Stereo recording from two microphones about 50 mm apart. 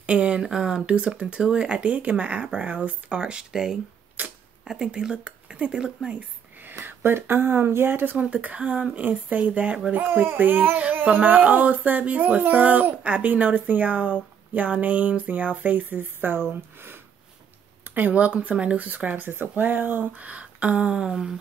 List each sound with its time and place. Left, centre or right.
0.0 s a sound: right
0.8 s speech: right
4.2 s speech: right
4.7 s speech: centre
6.8 s speech: right
8.2 s speech: right
17.8 s speech: right; by 21.4 s centre